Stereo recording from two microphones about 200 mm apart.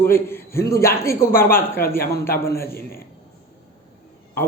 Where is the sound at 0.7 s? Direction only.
50° left (ahead or behind).